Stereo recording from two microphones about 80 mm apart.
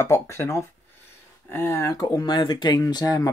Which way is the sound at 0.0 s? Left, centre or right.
Left.